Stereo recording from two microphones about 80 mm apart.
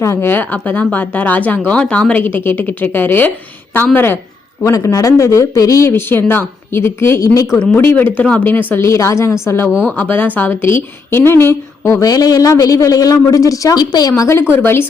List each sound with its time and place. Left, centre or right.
0.0 s speech: left
4.6 s a woman's voice: left
5.9 s a woman's voice: left
7.8 s speech: left
9.8 s a woman's voice: left
14.2 s a woman's voice: left